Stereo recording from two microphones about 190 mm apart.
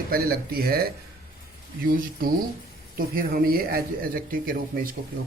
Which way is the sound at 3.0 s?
50° right (ahead or behind).